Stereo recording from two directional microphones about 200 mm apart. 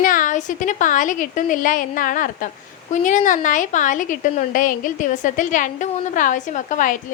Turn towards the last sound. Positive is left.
turn(degrees=40)  # may be behind; listen again after turning